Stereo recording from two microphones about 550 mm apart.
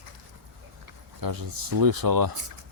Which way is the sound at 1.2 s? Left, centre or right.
Right.